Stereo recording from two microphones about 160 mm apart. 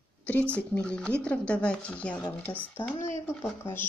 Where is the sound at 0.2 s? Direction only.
10° left (ahead or behind).